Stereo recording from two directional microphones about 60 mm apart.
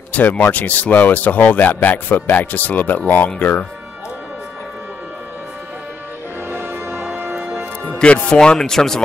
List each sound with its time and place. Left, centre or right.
0.1 s speech: left
6.5 s music: right
8.0 s speech: centre